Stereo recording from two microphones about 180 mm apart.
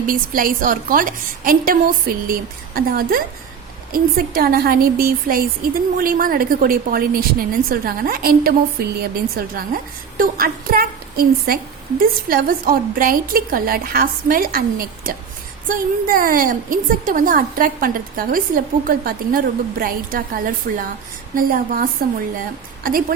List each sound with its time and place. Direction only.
0.0 s a woman's voice: 50° right (ahead or behind)